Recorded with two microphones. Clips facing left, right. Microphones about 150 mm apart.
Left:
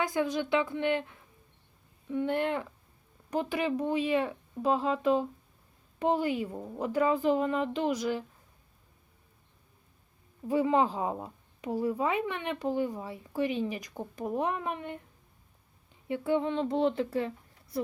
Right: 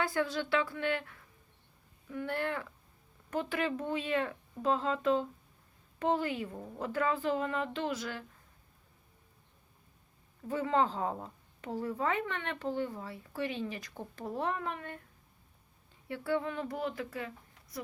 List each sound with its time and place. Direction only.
0.0 s a woman's voice: 15° left (ahead or behind)
10.5 s a woman's voice: 15° left (ahead or behind)
16.0 s speech: 20° left (ahead or behind)